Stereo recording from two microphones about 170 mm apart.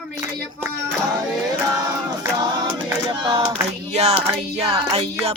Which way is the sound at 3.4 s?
35° right (ahead or behind).